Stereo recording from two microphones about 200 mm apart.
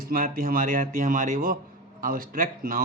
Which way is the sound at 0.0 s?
45° right (ahead or behind).